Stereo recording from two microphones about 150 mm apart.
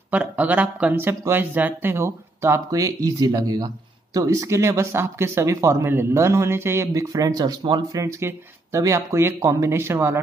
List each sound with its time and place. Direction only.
0.1 s speech: 10° right (ahead or behind)